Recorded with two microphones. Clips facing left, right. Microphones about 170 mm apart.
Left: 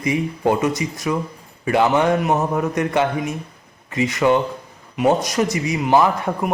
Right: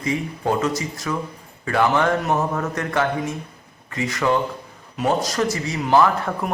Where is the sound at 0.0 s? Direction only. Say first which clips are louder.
Left 4 dB; 20° left (ahead or behind).